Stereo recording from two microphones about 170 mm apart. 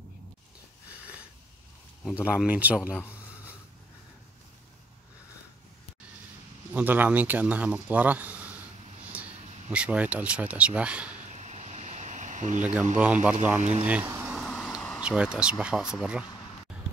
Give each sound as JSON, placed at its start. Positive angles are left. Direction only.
{"t": 2.2, "sound": "speech", "side_deg": -5}
{"t": 6.7, "sound": "speech", "side_deg": -10}
{"t": 11.3, "sound": "a sound", "side_deg": -40}
{"t": 12.9, "sound": "speech", "side_deg": -10}